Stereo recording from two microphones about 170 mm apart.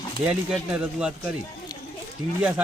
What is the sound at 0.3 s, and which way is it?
Speech, 5° right (ahead or behind).